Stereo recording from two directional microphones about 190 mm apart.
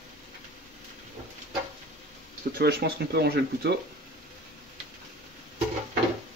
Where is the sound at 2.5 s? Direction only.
55° right (ahead or behind).